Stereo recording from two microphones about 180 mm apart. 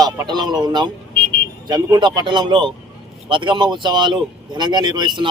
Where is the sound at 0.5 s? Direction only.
25° right (ahead or behind).